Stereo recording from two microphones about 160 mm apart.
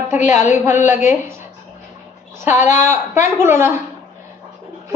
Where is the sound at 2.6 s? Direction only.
45° left (ahead or behind).